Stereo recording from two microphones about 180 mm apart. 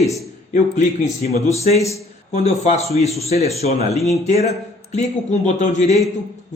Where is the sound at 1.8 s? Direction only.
15° left (ahead or behind).